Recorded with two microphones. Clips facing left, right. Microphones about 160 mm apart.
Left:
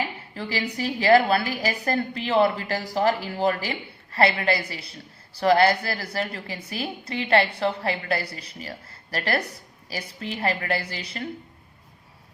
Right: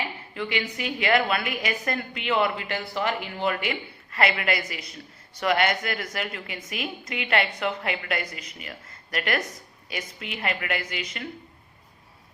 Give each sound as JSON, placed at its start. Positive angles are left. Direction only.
{"t": 0.3, "sound": "a woman's voice", "side_deg": 35}